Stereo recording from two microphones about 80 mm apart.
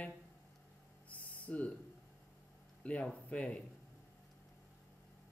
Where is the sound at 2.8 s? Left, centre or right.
Centre.